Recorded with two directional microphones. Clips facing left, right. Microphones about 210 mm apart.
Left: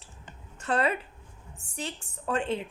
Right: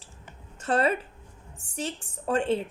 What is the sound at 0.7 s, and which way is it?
Speech, 30° right (ahead or behind).